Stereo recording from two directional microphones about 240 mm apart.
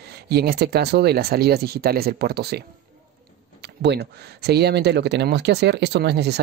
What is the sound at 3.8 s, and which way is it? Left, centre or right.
Speech, right.